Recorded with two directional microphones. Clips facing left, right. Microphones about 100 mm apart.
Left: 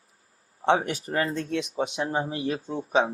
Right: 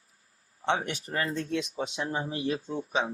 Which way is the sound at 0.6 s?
35° left (ahead or behind).